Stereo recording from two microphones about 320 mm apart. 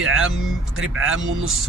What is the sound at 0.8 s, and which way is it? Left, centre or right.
Speech, right.